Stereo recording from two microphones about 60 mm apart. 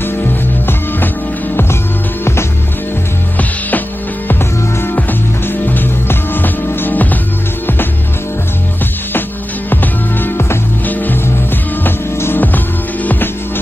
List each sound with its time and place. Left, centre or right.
5.7 s music: left
9.7 s music: left
11.8 s music: left